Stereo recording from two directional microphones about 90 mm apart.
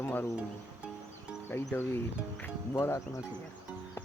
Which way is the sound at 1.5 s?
20° left (ahead or behind).